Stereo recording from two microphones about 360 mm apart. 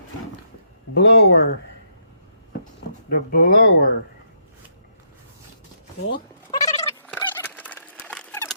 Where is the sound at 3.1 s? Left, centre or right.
Left.